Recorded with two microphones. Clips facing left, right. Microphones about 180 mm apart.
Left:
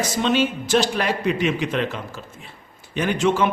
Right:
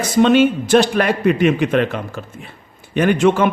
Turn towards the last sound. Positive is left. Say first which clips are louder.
# right 6 dB
turn(degrees=-55)  # may be behind; listen again after turning